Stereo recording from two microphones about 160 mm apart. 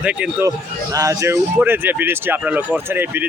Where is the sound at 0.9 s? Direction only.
20° right (ahead or behind).